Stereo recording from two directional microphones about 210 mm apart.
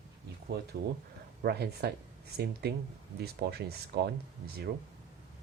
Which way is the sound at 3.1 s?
50° right (ahead or behind).